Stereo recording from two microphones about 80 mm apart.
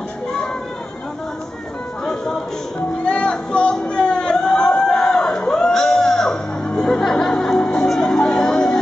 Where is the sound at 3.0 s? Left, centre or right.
Centre.